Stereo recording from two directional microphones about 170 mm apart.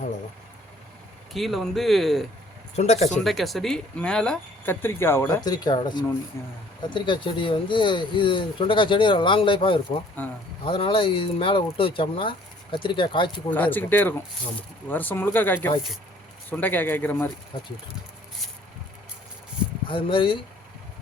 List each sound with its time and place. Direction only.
1.3 s speech: centre (ahead or behind)
2.7 s speech: 40° left (ahead or behind)
3.2 s speech: centre (ahead or behind); by 6.5 s 15° left (ahead or behind)
6.9 s speech: 30° left (ahead or behind)
10.2 s speech: 10° left (ahead or behind)
10.7 s speech: 30° left (ahead or behind)
13.5 s speech: 10° left (ahead or behind)
19.9 s speech: 30° left (ahead or behind)